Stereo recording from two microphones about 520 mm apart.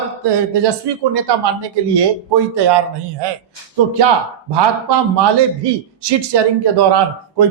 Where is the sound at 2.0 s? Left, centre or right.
Right.